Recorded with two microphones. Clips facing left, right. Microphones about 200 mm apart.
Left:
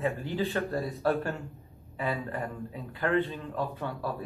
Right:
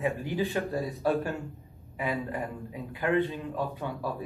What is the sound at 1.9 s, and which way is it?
A man's voice, 15° right (ahead or behind).